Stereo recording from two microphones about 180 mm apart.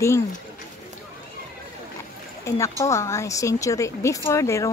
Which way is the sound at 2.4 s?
15° left (ahead or behind).